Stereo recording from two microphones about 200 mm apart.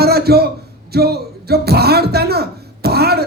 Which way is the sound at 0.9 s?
50° right (ahead or behind).